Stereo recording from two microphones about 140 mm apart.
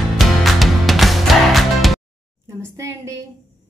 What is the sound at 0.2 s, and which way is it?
Music, centre (ahead or behind).